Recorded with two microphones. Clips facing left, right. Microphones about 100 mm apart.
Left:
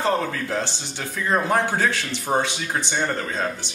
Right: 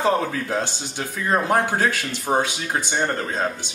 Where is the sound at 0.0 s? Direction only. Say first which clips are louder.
Right 2 dB; 10° right (ahead or behind).